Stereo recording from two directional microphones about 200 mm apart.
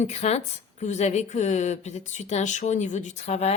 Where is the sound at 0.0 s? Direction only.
35° left (ahead or behind).